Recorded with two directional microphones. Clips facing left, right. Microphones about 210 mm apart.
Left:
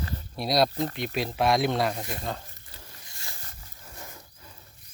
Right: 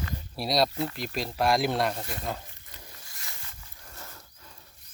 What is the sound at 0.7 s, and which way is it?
Speech, 35° left (ahead or behind).